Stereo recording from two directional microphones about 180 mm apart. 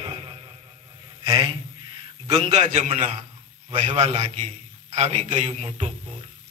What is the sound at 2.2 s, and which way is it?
Speech, 30° right (ahead or behind).